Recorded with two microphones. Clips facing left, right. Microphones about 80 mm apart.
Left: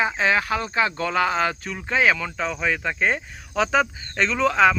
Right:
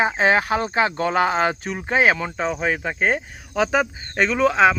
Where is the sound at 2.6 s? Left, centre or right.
Centre.